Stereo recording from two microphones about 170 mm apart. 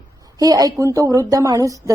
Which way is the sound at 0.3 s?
20° right (ahead or behind).